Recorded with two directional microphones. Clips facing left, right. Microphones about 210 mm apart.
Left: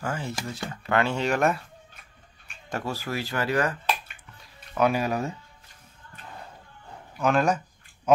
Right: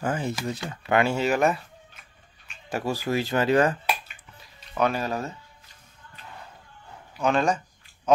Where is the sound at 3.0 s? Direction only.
20° right (ahead or behind).